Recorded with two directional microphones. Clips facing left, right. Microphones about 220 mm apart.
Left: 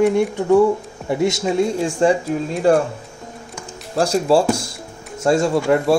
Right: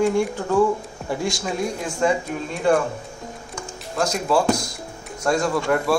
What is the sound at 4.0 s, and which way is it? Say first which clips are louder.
Speech: left 5 dB; 30° left (ahead or behind).